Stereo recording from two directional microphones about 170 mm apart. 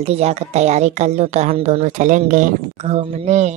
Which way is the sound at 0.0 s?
40° right (ahead or behind).